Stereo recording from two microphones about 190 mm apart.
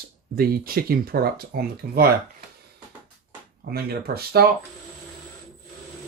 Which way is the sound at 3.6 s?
55° right (ahead or behind).